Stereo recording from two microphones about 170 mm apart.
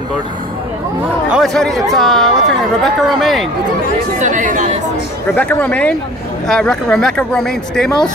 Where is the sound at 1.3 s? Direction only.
Centre (ahead or behind).